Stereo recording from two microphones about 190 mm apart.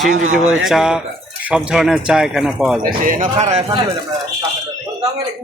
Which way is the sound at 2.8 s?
45° right (ahead or behind).